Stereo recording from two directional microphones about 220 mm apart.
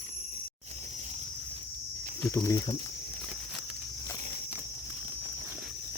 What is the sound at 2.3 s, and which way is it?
Speech, 15° left (ahead or behind).